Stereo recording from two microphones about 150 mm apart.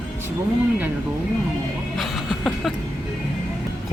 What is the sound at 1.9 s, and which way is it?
Music, centre (ahead or behind).